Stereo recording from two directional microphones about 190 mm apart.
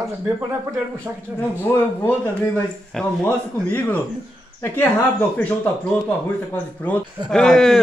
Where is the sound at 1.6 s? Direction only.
10° left (ahead or behind).